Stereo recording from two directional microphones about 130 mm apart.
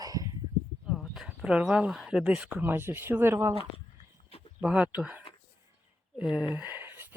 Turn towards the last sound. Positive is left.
turn(degrees=-15)  # may be behind; listen again after turning